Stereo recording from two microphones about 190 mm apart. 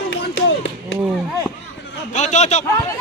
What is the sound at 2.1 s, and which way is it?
Speech, 40° left (ahead or behind).